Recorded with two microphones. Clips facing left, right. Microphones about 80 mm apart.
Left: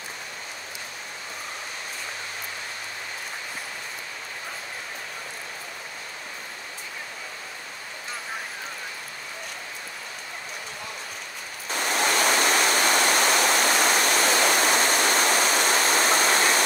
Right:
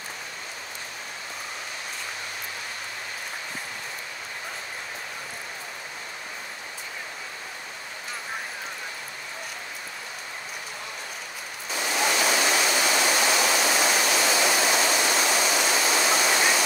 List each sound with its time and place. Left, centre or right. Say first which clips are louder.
11.7 s waterfall: left 1 dB; left